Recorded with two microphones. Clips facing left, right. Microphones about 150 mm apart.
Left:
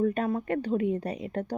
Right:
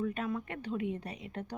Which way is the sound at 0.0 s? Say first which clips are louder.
Left 8 dB; 40° left (ahead or behind).